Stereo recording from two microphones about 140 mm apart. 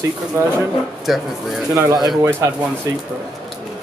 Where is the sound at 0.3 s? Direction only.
20° right (ahead or behind).